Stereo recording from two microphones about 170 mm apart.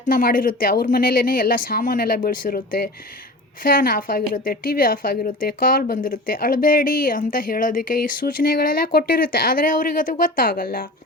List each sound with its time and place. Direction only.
0.0 s a woman's voice: 60° left (ahead or behind)